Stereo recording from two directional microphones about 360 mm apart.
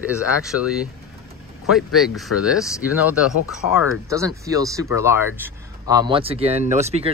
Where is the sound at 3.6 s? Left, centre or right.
Left.